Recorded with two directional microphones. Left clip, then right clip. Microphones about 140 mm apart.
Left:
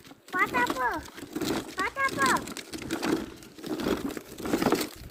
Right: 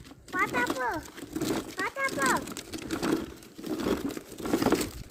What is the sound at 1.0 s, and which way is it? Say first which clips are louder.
Vehicle: even; 20° left (ahead or behind).